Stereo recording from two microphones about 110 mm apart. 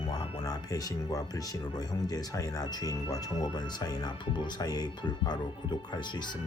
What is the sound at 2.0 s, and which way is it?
Speech, 35° left (ahead or behind).